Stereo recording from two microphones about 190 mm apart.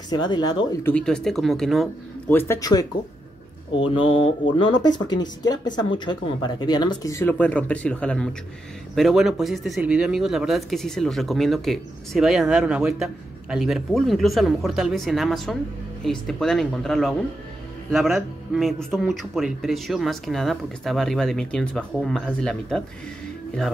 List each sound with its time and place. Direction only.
0.1 s speech: 20° left (ahead or behind)
0.8 s speech: 5° left (ahead or behind)
2.3 s speech: 15° left (ahead or behind)
5.5 s speech: 20° left (ahead or behind); by 22.8 s 5° left (ahead or behind)